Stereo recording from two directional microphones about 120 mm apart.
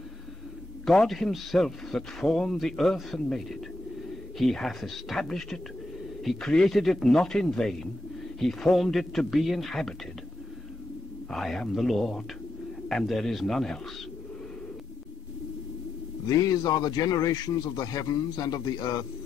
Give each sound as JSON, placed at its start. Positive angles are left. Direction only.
{"t": 0.8, "sound": "a man's voice", "side_deg": 0}
{"t": 11.2, "sound": "a man's voice", "side_deg": 5}
{"t": 16.3, "sound": "a man's voice", "side_deg": 30}